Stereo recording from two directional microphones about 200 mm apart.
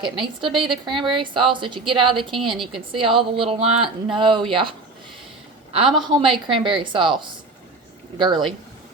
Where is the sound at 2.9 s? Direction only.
25° right (ahead or behind).